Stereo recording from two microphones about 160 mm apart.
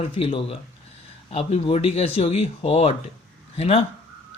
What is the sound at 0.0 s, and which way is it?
Speech, 35° left (ahead or behind).